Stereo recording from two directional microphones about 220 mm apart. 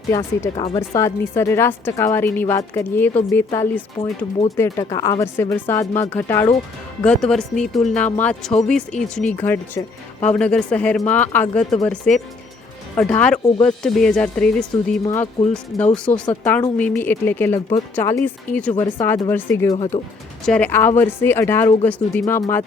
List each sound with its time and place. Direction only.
0.1 s a woman's voice: 10° left (ahead or behind)
0.5 s speech: 25° left (ahead or behind)
0.8 s a woman's voice: 15° left (ahead or behind)
18.7 s a woman's voice: 20° left (ahead or behind)
19.9 s speech: 35° left (ahead or behind)
20.4 s a woman's voice: 5° left (ahead or behind)